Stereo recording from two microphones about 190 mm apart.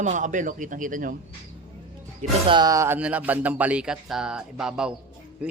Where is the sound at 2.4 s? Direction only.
20° right (ahead or behind); by 4.9 s 5° right (ahead or behind).